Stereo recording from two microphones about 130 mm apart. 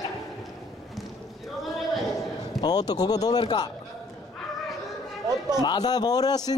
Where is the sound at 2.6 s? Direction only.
30° left (ahead or behind).